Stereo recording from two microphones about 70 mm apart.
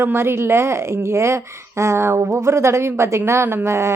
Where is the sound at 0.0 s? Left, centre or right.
Right.